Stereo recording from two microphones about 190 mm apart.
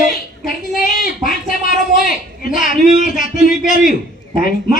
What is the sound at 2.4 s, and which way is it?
A man's voice, 45° left (ahead or behind).